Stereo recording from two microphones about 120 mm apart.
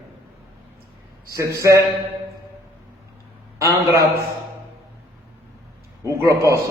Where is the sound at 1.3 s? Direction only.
25° right (ahead or behind).